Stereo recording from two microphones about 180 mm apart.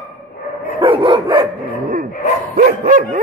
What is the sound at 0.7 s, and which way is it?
Dog, 30° right (ahead or behind).